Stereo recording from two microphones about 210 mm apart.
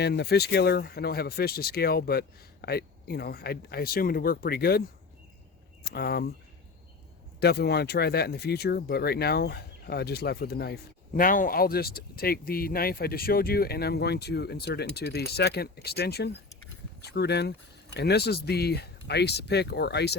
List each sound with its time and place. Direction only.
0.0 s speech: 50° left (ahead or behind)
5.8 s speech: 50° left (ahead or behind)
7.3 s speech: 50° left (ahead or behind)